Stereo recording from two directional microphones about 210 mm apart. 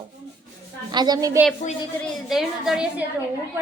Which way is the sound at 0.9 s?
20° right (ahead or behind).